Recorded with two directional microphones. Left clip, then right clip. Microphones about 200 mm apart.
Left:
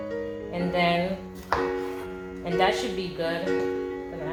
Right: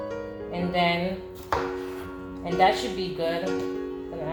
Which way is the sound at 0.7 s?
25° left (ahead or behind).